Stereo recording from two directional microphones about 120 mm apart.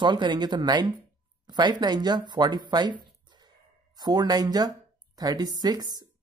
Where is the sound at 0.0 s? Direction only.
40° right (ahead or behind).